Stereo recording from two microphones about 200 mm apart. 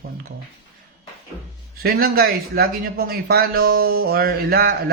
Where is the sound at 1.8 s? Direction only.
50° right (ahead or behind).